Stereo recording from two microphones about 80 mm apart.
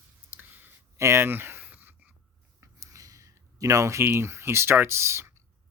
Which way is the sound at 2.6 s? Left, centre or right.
Right.